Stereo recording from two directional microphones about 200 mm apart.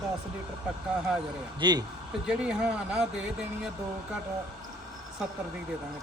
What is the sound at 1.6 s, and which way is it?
Speech, 20° right (ahead or behind).